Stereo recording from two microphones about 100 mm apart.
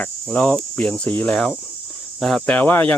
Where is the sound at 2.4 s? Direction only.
15° left (ahead or behind).